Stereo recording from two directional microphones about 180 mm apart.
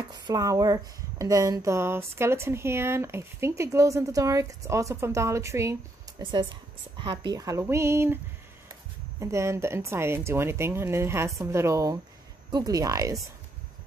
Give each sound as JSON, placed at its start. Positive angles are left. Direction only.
{"t": 0.1, "sound": "speech", "side_deg": -20}
{"t": 9.2, "sound": "speech", "side_deg": -15}